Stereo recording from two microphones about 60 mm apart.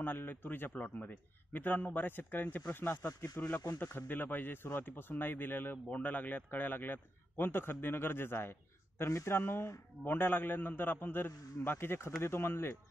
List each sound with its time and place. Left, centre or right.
0.0 s a man's voice: left
3.3 s a man's voice: left
5.9 s a man's voice: left